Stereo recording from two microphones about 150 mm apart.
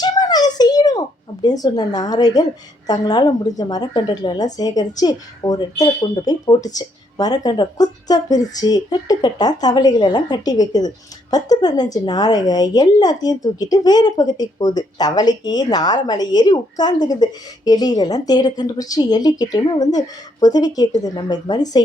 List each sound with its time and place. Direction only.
0.0 s a child's voice: 25° left (ahead or behind)